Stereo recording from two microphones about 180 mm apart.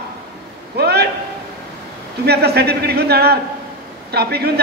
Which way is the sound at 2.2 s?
65° right (ahead or behind).